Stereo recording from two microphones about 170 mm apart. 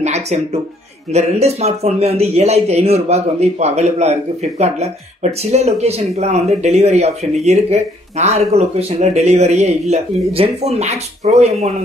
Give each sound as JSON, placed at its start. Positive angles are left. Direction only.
{"t": 0.0, "sound": "speech", "side_deg": -40}